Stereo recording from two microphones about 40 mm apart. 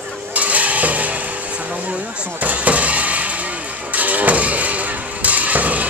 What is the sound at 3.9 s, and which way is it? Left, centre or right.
Music, right.